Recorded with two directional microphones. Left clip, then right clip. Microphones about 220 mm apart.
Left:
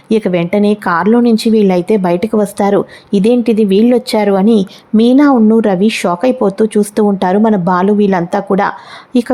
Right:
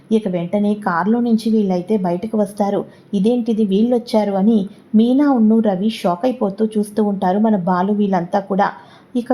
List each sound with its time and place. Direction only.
0.1 s speech: 35° left (ahead or behind)